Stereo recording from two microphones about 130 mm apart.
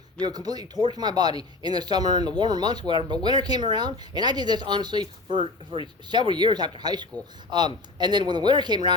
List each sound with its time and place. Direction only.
0.2 s speech: 30° right (ahead or behind)
6.1 s speech: 35° right (ahead or behind)